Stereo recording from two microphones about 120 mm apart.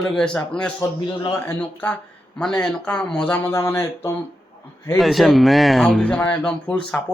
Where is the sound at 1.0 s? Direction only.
35° left (ahead or behind).